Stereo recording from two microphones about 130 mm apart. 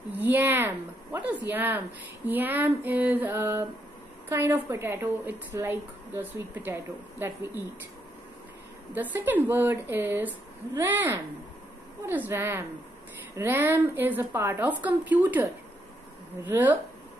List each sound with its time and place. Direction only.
0.1 s a woman's voice: 15° right (ahead or behind)
8.9 s a woman's voice: 15° right (ahead or behind)
16.4 s a woman's voice: 15° right (ahead or behind)